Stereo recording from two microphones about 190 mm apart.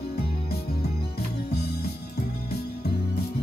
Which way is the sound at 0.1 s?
55° left (ahead or behind).